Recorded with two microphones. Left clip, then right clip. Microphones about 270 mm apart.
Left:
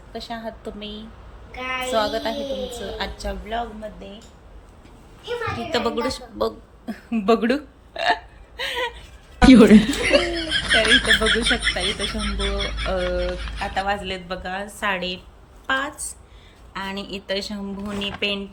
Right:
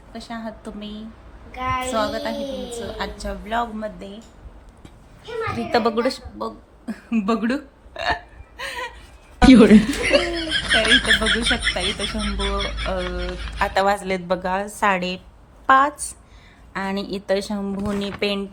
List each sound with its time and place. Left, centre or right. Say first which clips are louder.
0.1 s speech: left 1 dB; centre
1.5 s a woman's voice: right 3 dB; right
1.9 s speech: left 1 dB; centre
5.7 s a woman's voice: right 4 dB; centre
6.4 s hiccup: left 7 dB; centre
9.4 s speech: even; centre
13.7 s a woman's voice: right 4 dB; right